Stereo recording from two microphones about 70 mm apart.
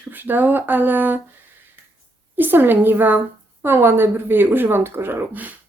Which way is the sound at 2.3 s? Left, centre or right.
Right.